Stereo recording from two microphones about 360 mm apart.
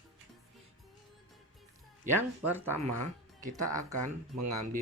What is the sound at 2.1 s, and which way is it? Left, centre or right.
Speech, centre.